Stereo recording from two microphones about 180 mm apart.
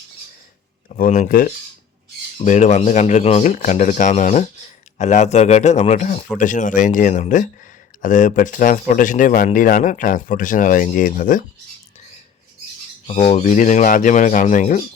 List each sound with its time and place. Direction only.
0.9 s speech: 50° left (ahead or behind)
13.1 s speech: 40° left (ahead or behind)